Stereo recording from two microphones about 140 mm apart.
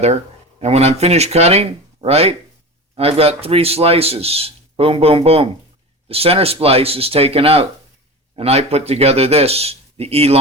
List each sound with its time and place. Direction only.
0.6 s speech: 50° right (ahead or behind)